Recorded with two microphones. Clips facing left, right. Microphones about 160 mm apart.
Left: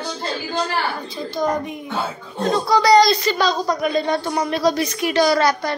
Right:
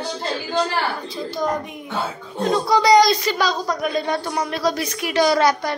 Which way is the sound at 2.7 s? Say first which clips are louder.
Left 1 dB; 15° right (ahead or behind).